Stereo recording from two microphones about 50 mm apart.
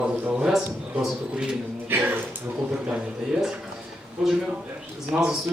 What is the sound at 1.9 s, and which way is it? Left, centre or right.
Speech, right.